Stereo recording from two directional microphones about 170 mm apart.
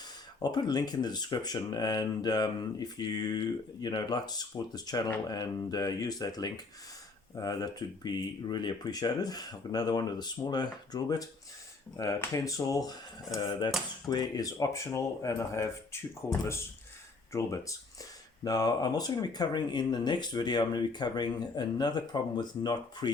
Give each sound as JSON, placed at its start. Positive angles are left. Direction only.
{"t": 0.4, "sound": "speech", "side_deg": 25}
{"t": 17.3, "sound": "speech", "side_deg": 20}